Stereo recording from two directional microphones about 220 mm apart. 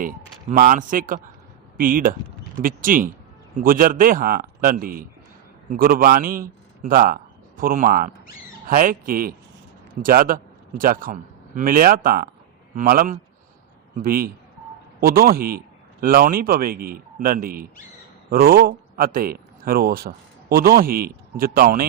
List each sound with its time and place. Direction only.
0.0 s a man's voice: 40° right (ahead or behind)